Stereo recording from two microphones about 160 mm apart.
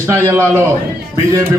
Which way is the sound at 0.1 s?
15° right (ahead or behind).